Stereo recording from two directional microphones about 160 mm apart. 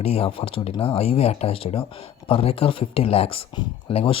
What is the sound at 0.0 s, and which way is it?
Speech, 35° left (ahead or behind).